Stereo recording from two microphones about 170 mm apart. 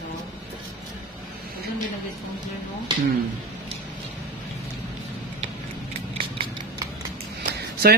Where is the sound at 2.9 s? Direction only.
25° right (ahead or behind).